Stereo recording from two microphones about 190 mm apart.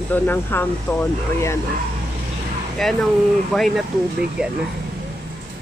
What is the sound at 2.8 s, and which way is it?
Speech, centre (ahead or behind).